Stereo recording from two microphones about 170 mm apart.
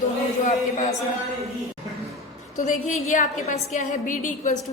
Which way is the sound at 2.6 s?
50° left (ahead or behind).